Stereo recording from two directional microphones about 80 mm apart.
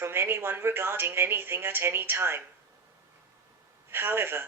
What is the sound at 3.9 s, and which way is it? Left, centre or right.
Speech, right.